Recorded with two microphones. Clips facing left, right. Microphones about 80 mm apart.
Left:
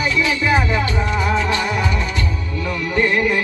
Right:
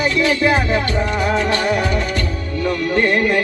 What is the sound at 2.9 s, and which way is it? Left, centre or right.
Music, right.